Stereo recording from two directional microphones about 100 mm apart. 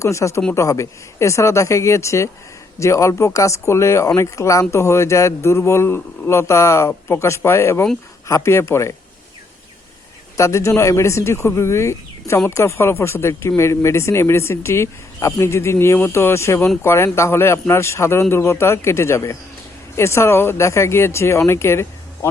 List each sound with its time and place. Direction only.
0.0 s a man's voice: 30° left (ahead or behind)
10.3 s a man's voice: 30° left (ahead or behind)